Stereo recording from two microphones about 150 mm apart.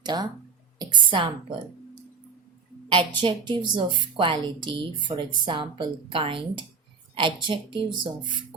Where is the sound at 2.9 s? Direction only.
35° right (ahead or behind).